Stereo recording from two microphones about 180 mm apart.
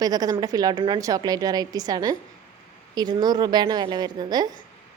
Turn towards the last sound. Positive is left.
turn(degrees=-20)  # may be behind; listen again after turning